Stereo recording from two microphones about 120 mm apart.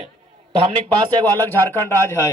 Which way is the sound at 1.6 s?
20° left (ahead or behind).